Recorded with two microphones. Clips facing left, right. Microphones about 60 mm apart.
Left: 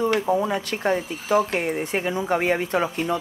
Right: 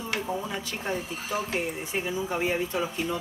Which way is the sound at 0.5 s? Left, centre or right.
Left.